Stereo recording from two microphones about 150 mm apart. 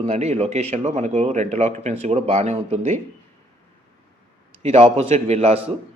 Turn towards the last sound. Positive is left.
turn(degrees=-45)  # may be behind; listen again after turning